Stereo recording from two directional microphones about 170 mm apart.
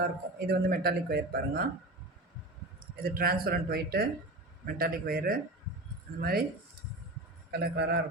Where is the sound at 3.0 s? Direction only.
60° right (ahead or behind).